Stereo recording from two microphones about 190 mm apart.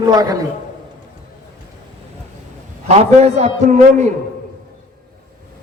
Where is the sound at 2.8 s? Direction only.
35° right (ahead or behind).